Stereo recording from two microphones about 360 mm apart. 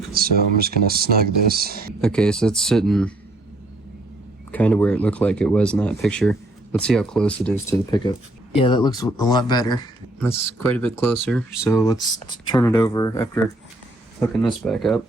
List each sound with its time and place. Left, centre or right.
0.1 s speech: right
2.0 s speech: centre
4.5 s speech: centre